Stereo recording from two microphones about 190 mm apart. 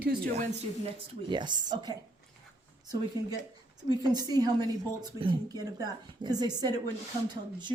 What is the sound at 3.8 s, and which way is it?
A woman's voice, 20° right (ahead or behind).